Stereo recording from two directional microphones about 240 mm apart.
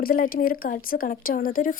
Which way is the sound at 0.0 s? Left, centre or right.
Left.